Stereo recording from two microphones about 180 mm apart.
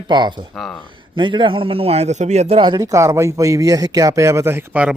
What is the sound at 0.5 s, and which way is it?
Speech, centre (ahead or behind).